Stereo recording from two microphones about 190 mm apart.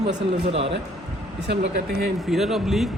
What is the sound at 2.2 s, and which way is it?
Speech, centre (ahead or behind).